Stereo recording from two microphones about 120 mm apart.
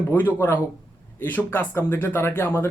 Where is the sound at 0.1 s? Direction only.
20° left (ahead or behind).